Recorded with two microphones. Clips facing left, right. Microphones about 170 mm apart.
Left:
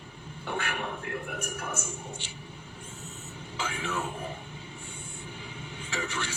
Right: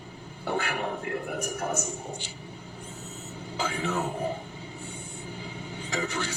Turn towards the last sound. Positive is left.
turn(degrees=-35)  # may be behind; listen again after turning